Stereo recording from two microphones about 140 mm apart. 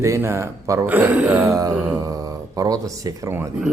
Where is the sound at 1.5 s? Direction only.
25° right (ahead or behind).